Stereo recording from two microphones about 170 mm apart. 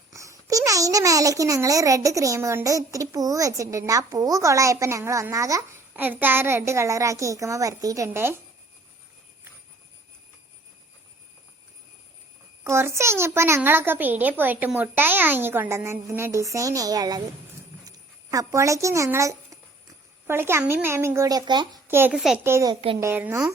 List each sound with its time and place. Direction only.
0.1 s a child's voice: 20° right (ahead or behind)
12.6 s a child's voice: 15° right (ahead or behind)
21.8 s a child's voice: 10° right (ahead or behind)
22.7 s a child's voice: 30° right (ahead or behind)
23.0 s a child's voice: 15° right (ahead or behind)